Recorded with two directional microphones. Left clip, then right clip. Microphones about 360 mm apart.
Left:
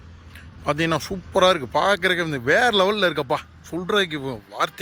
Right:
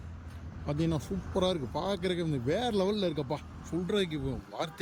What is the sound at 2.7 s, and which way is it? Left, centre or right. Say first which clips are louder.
Speech: left 11 dB; left.